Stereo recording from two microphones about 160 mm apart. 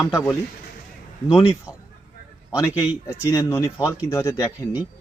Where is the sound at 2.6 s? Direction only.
20° left (ahead or behind).